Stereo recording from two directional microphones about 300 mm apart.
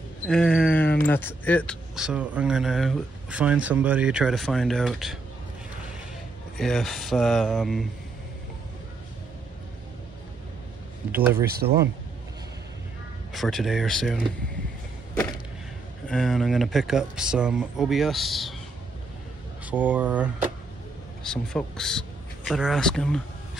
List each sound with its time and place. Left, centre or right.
0.3 s speech: centre
6.6 s speech: centre
11.1 s speech: centre
11.4 s speech: right
13.3 s speech: centre
16.1 s speech: centre
19.6 s speech: centre